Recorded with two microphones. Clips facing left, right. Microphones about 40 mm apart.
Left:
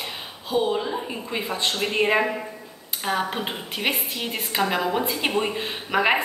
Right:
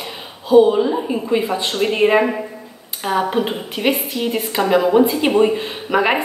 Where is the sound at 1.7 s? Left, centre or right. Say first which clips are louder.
Right 7 dB; centre.